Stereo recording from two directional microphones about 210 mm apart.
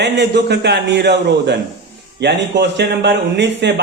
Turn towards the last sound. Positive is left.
turn(degrees=-55)  # may be behind; listen again after turning